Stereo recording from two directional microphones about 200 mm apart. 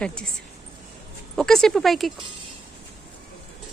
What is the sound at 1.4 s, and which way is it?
Speech, centre (ahead or behind).